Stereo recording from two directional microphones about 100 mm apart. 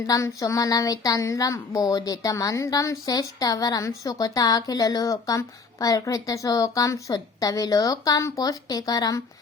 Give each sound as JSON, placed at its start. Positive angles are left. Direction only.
{"t": 0.0, "sound": "a woman's voice", "side_deg": 30}